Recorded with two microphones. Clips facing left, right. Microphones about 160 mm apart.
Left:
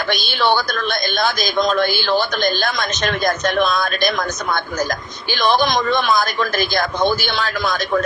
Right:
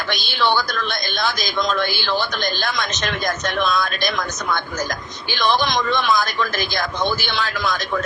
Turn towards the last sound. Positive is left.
turn(degrees=50)  # may be behind; listen again after turning